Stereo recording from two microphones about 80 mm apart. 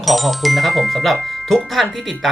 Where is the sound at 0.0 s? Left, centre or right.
Centre.